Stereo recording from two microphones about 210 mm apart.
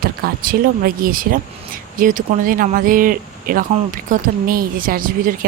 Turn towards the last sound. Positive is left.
turn(degrees=-40)  # may be behind; listen again after turning